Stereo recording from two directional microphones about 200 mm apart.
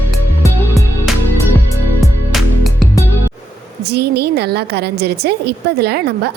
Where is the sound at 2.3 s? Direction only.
Centre (ahead or behind).